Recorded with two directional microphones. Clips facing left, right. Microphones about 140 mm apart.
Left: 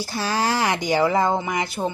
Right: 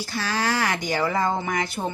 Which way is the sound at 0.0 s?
35° left (ahead or behind).